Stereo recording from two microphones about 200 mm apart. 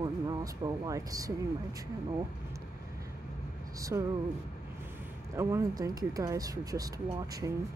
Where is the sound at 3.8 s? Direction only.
15° right (ahead or behind).